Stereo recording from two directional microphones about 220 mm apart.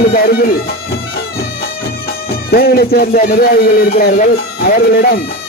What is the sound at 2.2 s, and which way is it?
Speech, 45° left (ahead or behind).